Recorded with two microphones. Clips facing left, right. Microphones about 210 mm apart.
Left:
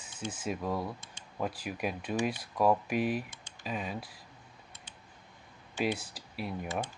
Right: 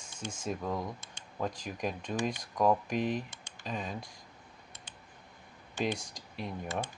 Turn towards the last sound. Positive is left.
turn(degrees=5)  # may be behind; listen again after turning